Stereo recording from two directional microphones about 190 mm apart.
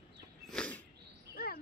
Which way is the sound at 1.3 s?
50° left (ahead or behind).